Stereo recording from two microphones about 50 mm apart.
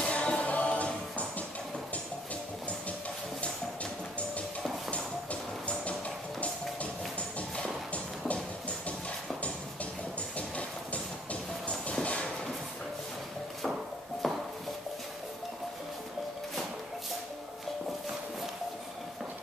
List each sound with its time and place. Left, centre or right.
0.0 s music: left
4.9 s music: left
7.9 s music: left
10.3 s music: left
14.2 s a sound: centre